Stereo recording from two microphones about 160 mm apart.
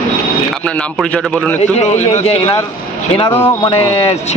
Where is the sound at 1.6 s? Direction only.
45° left (ahead or behind).